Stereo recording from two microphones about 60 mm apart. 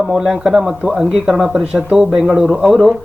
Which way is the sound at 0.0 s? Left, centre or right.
Centre.